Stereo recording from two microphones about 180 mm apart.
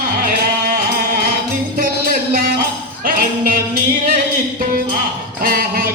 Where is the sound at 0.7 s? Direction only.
55° right (ahead or behind).